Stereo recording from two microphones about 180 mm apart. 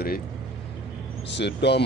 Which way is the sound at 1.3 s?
70° left (ahead or behind).